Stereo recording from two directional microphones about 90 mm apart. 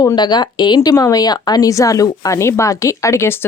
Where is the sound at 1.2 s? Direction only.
50° left (ahead or behind).